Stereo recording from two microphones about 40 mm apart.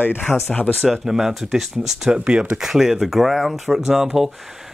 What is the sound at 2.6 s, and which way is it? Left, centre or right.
Speech, centre.